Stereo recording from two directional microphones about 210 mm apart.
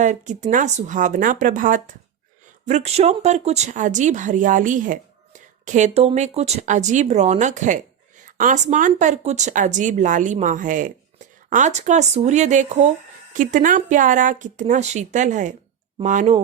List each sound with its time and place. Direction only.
0.0 s speech: 35° right (ahead or behind)